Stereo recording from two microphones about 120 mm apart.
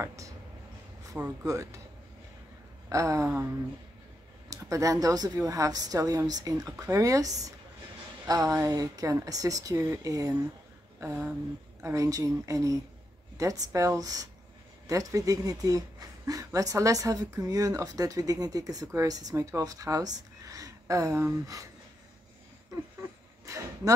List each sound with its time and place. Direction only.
0.0 s a woman's voice: 25° right (ahead or behind)
1.4 s a woman's voice: 25° right (ahead or behind)
2.9 s a woman's voice: 25° right (ahead or behind)
4.5 s a woman's voice: 25° right (ahead or behind)
23.4 s a sound: 25° right (ahead or behind)